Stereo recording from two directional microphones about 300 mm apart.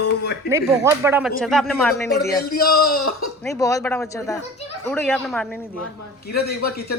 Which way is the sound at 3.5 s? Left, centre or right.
Centre.